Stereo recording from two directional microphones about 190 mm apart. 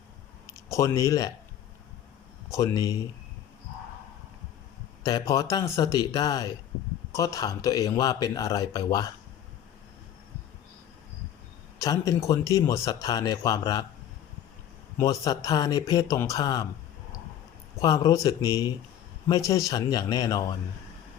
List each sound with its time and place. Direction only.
0.5 s speech: 15° left (ahead or behind)
2.5 s speech: 15° left (ahead or behind)
5.0 s speech: 20° left (ahead or behind)
11.8 s speech: 15° left (ahead or behind)
14.9 s speech: 20° left (ahead or behind)
17.7 s speech: 20° left (ahead or behind)